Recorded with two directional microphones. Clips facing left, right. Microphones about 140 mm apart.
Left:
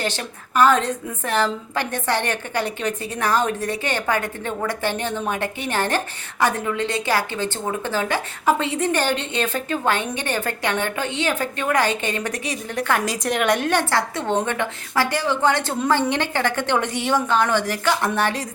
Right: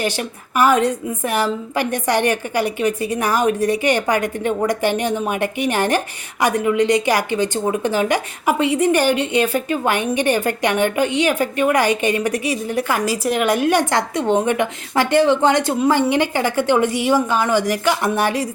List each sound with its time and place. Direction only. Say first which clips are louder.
0.0 s a woman's voice: right 4 dB; 10° right (ahead or behind)